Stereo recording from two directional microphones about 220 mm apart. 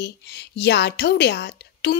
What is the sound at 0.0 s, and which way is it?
A woman's voice, 50° left (ahead or behind).